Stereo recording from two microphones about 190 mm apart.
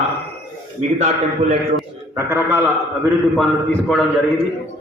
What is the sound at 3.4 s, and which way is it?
Speech, centre (ahead or behind).